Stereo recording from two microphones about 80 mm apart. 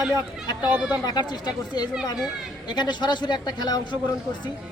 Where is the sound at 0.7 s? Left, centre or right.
Right.